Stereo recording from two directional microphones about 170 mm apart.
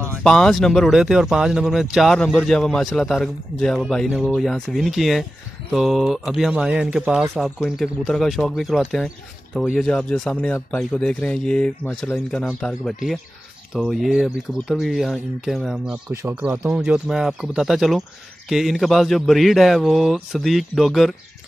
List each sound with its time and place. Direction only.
0.2 s speech: 5° left (ahead or behind)
16.1 s speech: 15° right (ahead or behind); by 21.1 s centre (ahead or behind)